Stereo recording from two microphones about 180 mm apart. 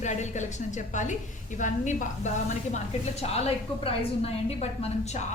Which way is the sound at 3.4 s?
30° left (ahead or behind).